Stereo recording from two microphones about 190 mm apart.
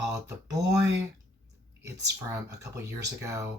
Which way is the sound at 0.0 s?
15° right (ahead or behind).